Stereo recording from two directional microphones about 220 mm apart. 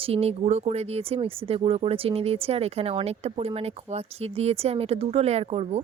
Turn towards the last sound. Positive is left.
turn(degrees=-25)  # may be behind; listen again after turning